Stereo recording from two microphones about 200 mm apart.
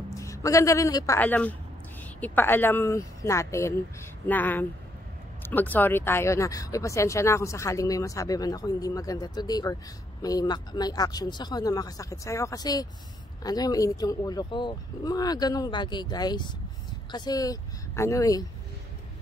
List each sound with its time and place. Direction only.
0.1 s a woman's voice: 15° left (ahead or behind)